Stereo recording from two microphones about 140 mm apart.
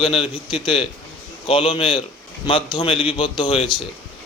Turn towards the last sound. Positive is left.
turn(degrees=40)  # may be behind; listen again after turning